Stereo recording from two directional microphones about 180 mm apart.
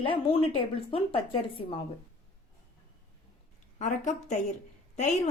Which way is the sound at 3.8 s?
40° left (ahead or behind).